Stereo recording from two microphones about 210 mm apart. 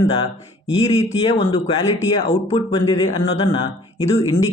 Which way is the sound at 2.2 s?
30° left (ahead or behind).